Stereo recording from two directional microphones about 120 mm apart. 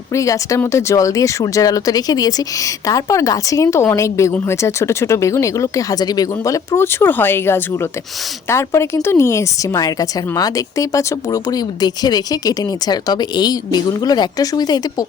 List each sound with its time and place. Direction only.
0.1 s a woman's voice: 25° left (ahead or behind)